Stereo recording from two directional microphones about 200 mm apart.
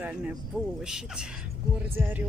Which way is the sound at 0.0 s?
5° right (ahead or behind).